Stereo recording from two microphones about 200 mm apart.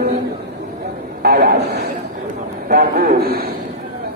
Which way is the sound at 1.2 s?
45° right (ahead or behind).